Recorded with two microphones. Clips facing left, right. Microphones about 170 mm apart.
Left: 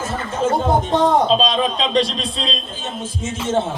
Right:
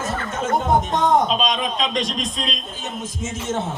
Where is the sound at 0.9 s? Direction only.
30° left (ahead or behind).